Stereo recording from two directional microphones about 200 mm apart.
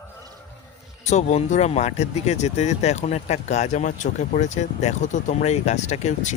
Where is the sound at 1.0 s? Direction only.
35° left (ahead or behind).